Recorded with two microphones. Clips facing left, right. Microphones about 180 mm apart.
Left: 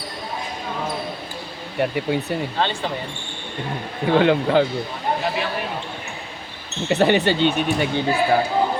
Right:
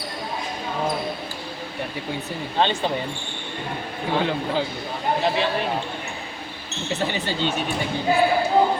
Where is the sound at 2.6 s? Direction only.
20° right (ahead or behind).